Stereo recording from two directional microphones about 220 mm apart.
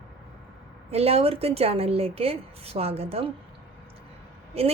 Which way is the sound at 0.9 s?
25° right (ahead or behind).